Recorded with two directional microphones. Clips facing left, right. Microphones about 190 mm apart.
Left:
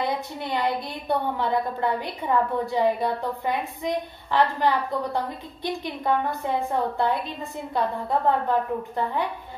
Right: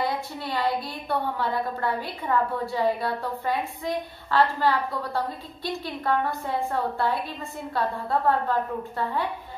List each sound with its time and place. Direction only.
0.0 s a woman's voice: 20° left (ahead or behind)